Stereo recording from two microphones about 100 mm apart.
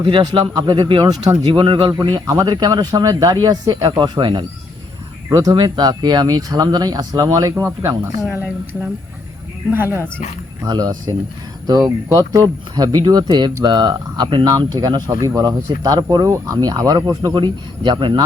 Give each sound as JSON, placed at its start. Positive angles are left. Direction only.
{"t": 0.1, "sound": "speech", "side_deg": -50}
{"t": 1.0, "sound": "speech", "side_deg": -35}
{"t": 1.5, "sound": "speech", "side_deg": -55}
{"t": 2.2, "sound": "speech", "side_deg": -35}
{"t": 5.3, "sound": "speech", "side_deg": -35}
{"t": 9.7, "sound": "speech", "side_deg": -20}
{"t": 10.6, "sound": "speech", "side_deg": -40}